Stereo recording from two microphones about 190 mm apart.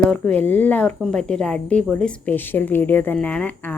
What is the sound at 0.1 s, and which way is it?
Speech, 10° left (ahead or behind).